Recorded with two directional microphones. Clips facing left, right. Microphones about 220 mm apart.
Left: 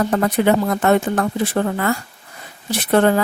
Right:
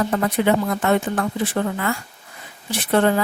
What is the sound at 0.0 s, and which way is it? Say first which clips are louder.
Speech: left 3 dB; 45° left (ahead or behind).